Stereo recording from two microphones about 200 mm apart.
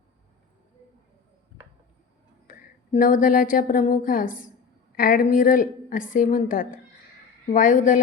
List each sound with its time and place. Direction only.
2.5 s a woman's voice: 40° left (ahead or behind)